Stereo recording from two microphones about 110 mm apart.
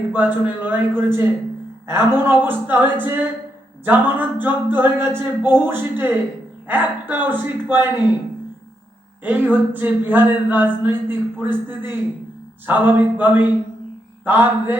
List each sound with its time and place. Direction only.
0.1 s a man's voice: 15° right (ahead or behind)
9.2 s a man's voice: 15° right (ahead or behind)